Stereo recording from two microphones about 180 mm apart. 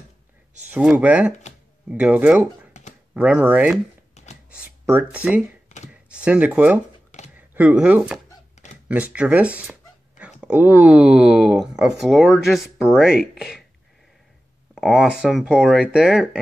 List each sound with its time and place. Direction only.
0.7 s speech: 10° right (ahead or behind)
4.1 s a sound: 40° left (ahead or behind)
5.1 s speech: 5° right (ahead or behind)
14.8 s speech: 5° right (ahead or behind)